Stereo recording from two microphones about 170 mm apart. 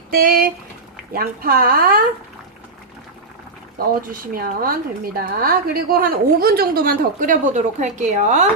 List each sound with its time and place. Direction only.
0.1 s a woman's voice: 60° right (ahead or behind)
3.8 s a woman's voice: 60° right (ahead or behind); by 8.4 s 45° right (ahead or behind)